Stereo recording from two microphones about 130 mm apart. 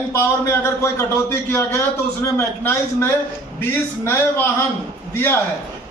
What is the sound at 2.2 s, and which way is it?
A man's voice, 20° left (ahead or behind).